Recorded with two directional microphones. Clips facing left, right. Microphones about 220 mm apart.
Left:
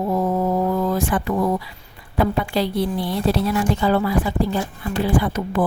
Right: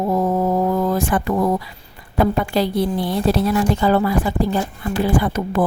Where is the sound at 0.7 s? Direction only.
45° right (ahead or behind).